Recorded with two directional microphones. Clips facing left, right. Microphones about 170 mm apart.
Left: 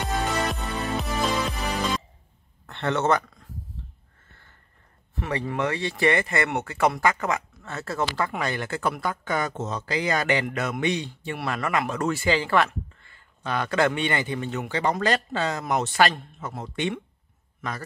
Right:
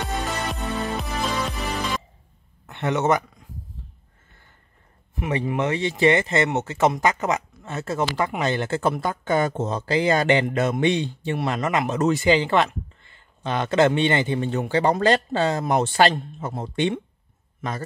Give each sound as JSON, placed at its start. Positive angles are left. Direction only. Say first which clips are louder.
{"t": 0.0, "sound": "music", "louder": "left 1 dB", "side_deg": 0}
{"t": 2.6, "sound": "speech", "louder": "right 2 dB", "side_deg": -15}
{"t": 5.2, "sound": "a man's voice", "louder": "right 3 dB", "side_deg": -15}